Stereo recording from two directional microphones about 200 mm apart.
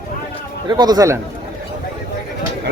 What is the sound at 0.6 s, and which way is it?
Speech, 20° right (ahead or behind).